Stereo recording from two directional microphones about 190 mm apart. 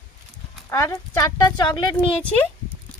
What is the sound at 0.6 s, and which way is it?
Speech, 15° left (ahead or behind).